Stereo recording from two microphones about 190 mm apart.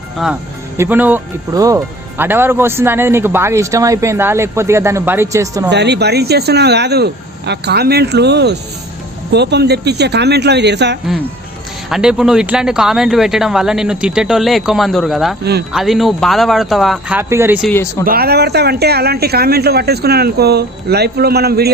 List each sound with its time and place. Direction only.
0.2 s speech: centre (ahead or behind); by 5.7 s 15° right (ahead or behind)
5.7 s speech: 65° right (ahead or behind)
11.9 s speech: centre (ahead or behind)
17.2 s speech: 15° right (ahead or behind)
18.0 s speech: 50° right (ahead or behind)